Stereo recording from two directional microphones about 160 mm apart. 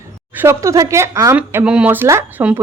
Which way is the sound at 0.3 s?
15° right (ahead or behind).